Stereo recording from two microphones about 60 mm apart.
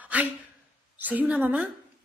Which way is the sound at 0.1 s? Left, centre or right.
Right.